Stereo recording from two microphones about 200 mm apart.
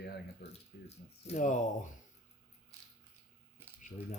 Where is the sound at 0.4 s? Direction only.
50° left (ahead or behind).